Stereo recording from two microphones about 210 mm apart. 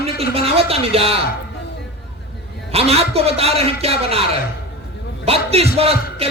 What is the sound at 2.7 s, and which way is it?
Speech, 30° right (ahead or behind).